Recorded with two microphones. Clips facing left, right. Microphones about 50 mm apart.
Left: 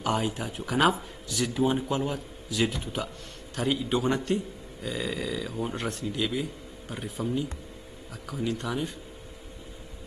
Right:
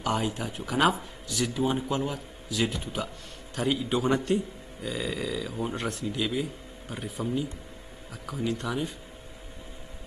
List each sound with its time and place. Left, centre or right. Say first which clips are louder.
0.0 s speech: even; centre